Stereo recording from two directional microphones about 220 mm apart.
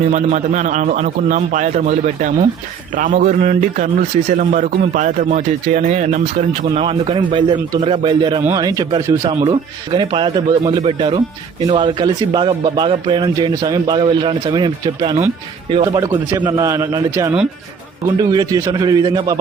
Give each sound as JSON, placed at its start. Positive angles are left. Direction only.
{"t": 0.1, "sound": "a man's voice", "side_deg": -35}
{"t": 9.3, "sound": "a man's voice", "side_deg": -25}